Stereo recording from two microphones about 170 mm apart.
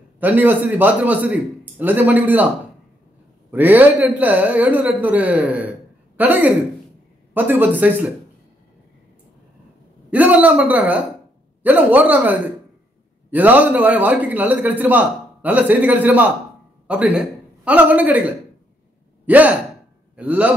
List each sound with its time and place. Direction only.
0.2 s a man's voice: 10° right (ahead or behind)
3.5 s a man's voice: 10° right (ahead or behind)
10.1 s a man's voice: 10° right (ahead or behind)